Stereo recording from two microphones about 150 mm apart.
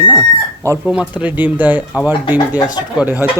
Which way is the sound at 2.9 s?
10° right (ahead or behind).